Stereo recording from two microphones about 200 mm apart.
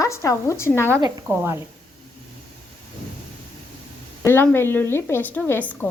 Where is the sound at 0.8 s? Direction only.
10° right (ahead or behind).